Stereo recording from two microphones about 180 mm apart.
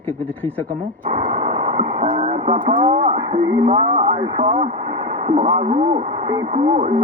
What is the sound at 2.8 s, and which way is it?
Speech, 45° right (ahead or behind).